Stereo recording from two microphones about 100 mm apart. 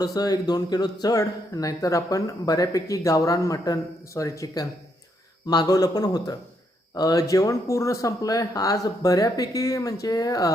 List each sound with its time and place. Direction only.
0.0 s speech: 40° left (ahead or behind)